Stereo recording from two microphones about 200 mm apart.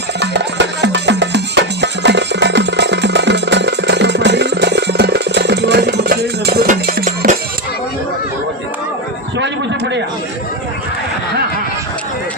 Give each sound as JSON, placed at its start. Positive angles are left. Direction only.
{"t": 0.2, "sound": "music", "side_deg": -60}